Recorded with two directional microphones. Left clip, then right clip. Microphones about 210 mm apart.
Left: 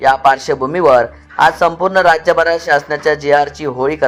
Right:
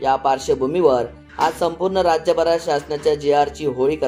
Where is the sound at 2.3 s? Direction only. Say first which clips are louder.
Left 5 dB; 40° left (ahead or behind).